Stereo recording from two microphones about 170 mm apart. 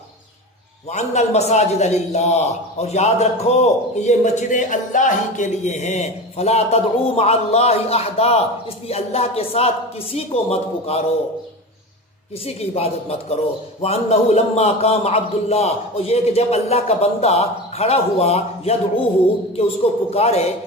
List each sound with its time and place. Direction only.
0.9 s a man's voice: 40° left (ahead or behind)
12.7 s a man's voice: 35° left (ahead or behind)